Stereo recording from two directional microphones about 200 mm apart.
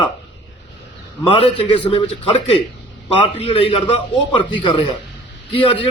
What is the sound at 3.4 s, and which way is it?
A man's voice, 30° left (ahead or behind).